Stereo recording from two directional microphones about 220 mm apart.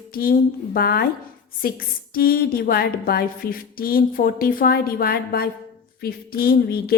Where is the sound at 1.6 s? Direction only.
40° left (ahead or behind).